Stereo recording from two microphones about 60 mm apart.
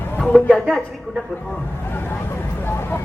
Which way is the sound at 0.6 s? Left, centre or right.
Centre.